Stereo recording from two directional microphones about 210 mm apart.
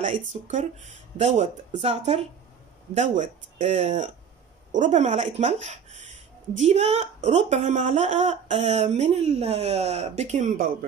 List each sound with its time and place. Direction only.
0.0 s speech: 30° right (ahead or behind)